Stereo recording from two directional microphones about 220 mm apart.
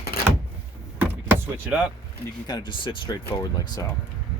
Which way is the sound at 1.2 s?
10° right (ahead or behind).